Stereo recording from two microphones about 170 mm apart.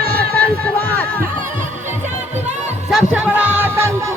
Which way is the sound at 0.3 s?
10° left (ahead or behind).